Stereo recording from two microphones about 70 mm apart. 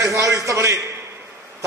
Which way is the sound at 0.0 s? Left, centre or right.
Right.